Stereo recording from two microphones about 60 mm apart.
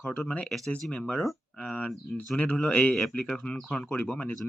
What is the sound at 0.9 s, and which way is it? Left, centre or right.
Speech, centre.